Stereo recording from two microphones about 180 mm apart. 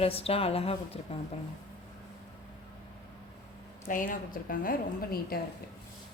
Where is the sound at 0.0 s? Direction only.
35° left (ahead or behind).